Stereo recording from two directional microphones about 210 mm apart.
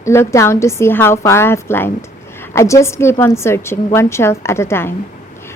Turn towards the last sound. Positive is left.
turn(degrees=10)  # may be behind; listen again after turning